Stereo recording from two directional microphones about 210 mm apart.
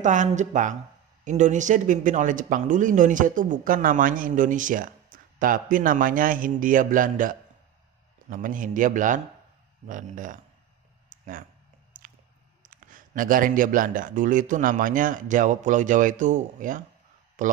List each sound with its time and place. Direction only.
0.0 s speech: 35° right (ahead or behind)
11.1 s a sound: 40° right (ahead or behind)
11.9 s squish: 40° right (ahead or behind)
12.6 s speech: 40° right (ahead or behind)